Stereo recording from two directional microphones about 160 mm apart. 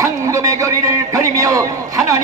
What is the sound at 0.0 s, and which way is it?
A man's voice, 20° right (ahead or behind).